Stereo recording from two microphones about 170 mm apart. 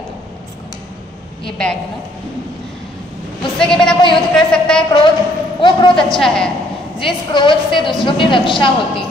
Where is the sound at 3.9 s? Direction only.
30° left (ahead or behind).